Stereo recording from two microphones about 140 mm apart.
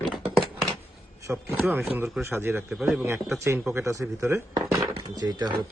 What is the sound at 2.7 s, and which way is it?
Speech, 5° right (ahead or behind).